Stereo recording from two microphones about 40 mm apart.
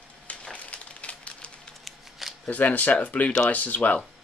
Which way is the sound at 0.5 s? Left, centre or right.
Left.